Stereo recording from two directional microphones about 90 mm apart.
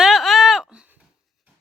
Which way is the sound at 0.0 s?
Centre (ahead or behind).